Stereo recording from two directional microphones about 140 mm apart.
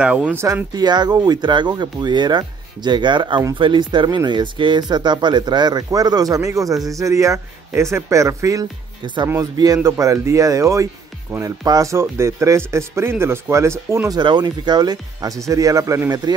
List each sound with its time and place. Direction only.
0.0 s speech: 10° right (ahead or behind)
0.7 s speech: 30° right (ahead or behind)
9.0 s speech: 35° right (ahead or behind)
14.1 s speech: 30° right (ahead or behind)